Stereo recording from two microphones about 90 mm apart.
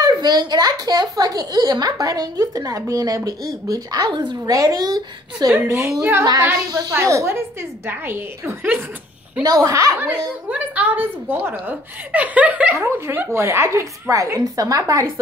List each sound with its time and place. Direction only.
0.0 s a child's voice: 50° right (ahead or behind)
4.5 s a child's voice: 40° right (ahead or behind)
5.5 s a woman's voice: 30° right (ahead or behind)
9.4 s speech: 40° right (ahead or behind)
10.5 s a woman's voice: 20° right (ahead or behind)
12.7 s speech: 30° right (ahead or behind)